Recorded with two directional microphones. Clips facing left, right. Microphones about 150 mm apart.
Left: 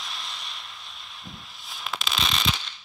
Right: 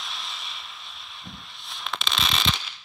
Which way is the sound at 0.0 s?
Centre (ahead or behind).